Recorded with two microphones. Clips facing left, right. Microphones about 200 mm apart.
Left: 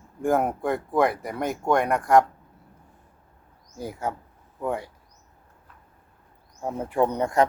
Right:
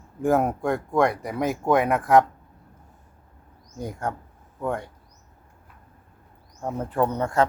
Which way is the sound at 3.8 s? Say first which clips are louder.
Even; 5° left (ahead or behind).